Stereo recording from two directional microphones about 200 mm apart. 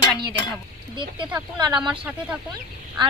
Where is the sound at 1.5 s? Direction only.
20° right (ahead or behind).